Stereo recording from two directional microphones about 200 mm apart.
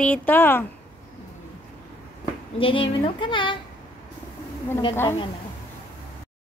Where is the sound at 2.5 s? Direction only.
25° left (ahead or behind).